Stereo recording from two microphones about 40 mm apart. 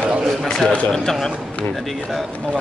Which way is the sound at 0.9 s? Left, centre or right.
Centre.